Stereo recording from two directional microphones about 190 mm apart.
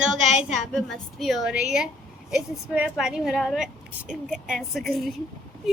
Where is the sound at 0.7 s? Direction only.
Centre (ahead or behind).